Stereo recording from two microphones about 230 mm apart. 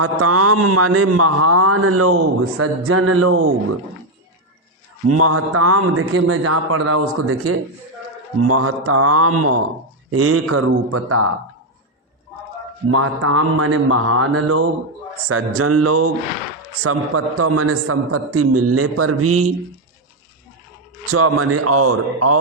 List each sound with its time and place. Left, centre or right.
0.0 s a man's voice: right
5.0 s a man's voice: right
12.9 s a man's voice: right
21.1 s a man's voice: right